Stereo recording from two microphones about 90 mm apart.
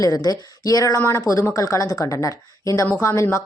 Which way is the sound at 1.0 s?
30° left (ahead or behind).